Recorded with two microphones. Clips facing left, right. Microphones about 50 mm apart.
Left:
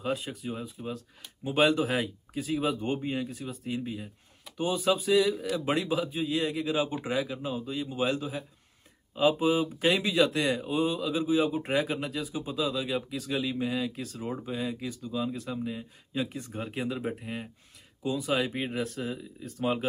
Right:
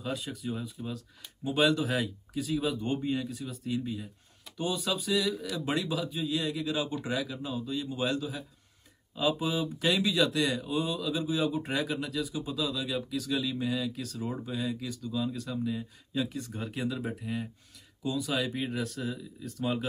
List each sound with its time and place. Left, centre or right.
0.0 s speech: left
17.1 s speech: left